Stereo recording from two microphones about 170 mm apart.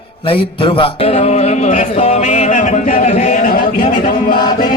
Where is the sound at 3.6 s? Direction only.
30° left (ahead or behind).